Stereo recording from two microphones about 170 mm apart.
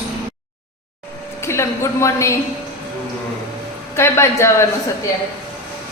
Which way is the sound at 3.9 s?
15° left (ahead or behind).